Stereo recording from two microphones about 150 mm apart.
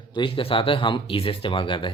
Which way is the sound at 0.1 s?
35° left (ahead or behind).